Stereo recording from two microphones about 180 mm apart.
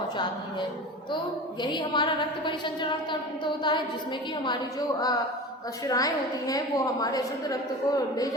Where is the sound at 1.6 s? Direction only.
25° left (ahead or behind).